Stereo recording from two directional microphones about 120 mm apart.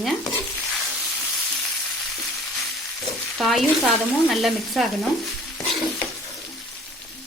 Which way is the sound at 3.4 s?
Centre (ahead or behind).